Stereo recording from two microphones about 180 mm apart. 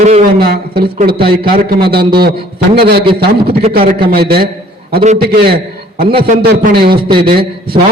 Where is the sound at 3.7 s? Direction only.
60° right (ahead or behind).